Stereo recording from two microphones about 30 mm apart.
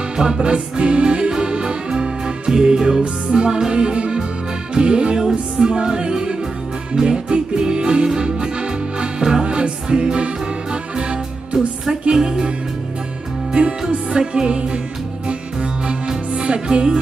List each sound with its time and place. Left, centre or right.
0.2 s music: right
12.1 s music: right
13.6 s music: right
16.3 s music: right